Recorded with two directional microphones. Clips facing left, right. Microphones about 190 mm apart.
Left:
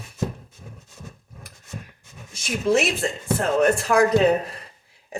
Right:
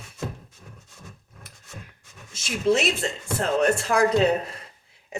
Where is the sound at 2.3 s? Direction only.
25° right (ahead or behind).